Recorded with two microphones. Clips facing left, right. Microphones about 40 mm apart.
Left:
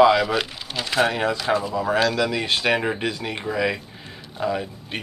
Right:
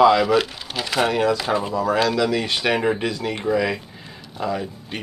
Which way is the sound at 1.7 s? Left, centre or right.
Left.